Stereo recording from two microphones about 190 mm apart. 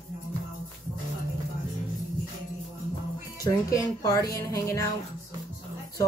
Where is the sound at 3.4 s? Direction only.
20° left (ahead or behind).